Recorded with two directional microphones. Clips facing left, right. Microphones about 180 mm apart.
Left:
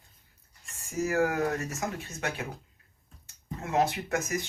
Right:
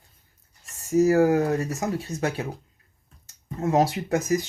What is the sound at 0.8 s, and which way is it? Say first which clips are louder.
Speech: right 9 dB; 40° right (ahead or behind).